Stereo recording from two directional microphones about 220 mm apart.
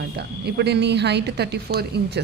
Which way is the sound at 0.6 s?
50° right (ahead or behind).